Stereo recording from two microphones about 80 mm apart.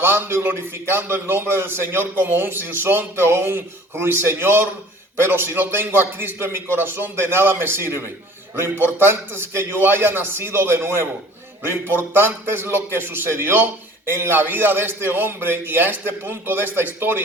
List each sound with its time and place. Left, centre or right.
0.0 s a man's voice: right